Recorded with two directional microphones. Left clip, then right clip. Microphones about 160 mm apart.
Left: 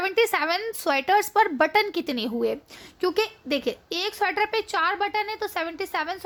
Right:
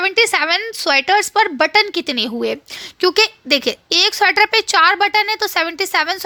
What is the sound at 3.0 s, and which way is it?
A woman's voice, 45° right (ahead or behind).